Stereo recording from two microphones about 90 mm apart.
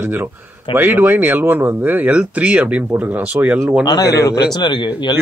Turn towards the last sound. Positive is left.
turn(degrees=55)  # may be behind; listen again after turning